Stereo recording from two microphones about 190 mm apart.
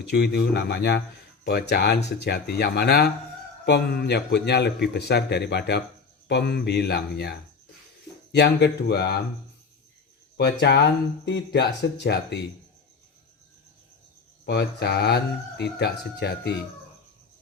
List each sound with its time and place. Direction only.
0.1 s speech: 60° left (ahead or behind)
10.3 s speech: 60° left (ahead or behind)
14.4 s speech: 60° left (ahead or behind)